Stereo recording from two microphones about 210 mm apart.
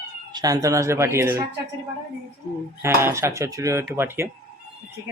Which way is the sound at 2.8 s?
10° right (ahead or behind).